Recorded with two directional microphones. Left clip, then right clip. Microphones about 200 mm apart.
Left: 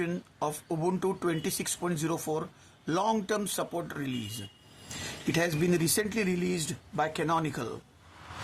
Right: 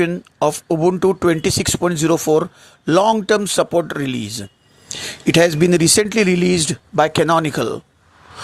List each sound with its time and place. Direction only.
0.3 s speech: 35° right (ahead or behind)